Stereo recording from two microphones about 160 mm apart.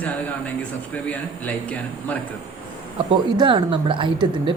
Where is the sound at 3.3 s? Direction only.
30° right (ahead or behind).